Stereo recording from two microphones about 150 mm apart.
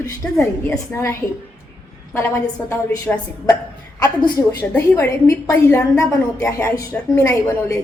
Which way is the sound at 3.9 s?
25° left (ahead or behind).